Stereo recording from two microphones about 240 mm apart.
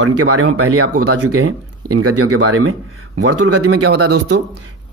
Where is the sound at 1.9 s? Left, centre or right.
Right.